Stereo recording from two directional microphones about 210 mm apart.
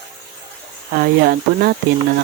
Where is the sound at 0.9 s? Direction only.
50° right (ahead or behind).